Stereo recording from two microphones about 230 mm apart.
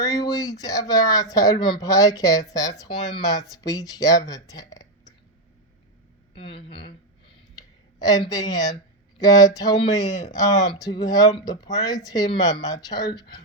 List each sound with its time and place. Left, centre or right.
0.0 s speech: centre
6.3 s a sound: left
7.9 s speech: centre